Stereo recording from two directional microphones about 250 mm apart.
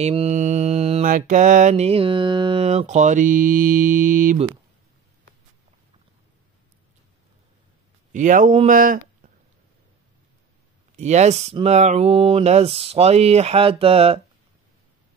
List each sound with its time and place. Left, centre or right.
0.0 s mantra: right
8.1 s speech: right
11.0 s mantra: right